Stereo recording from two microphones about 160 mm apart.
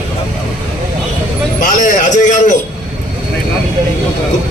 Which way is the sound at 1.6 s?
55° left (ahead or behind).